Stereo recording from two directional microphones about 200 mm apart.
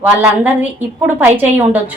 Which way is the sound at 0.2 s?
10° right (ahead or behind).